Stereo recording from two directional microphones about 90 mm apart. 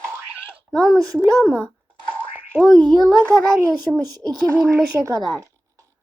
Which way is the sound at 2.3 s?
10° right (ahead or behind).